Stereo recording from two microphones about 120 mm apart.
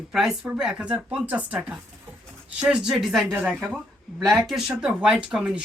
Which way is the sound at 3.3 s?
15° right (ahead or behind).